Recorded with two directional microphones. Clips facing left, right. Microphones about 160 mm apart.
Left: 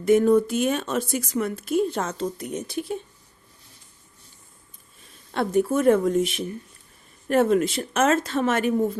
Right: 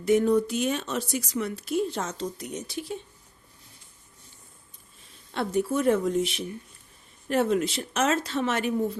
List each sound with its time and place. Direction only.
0.0 s speech: 50° left (ahead or behind)
5.3 s speech: 50° left (ahead or behind)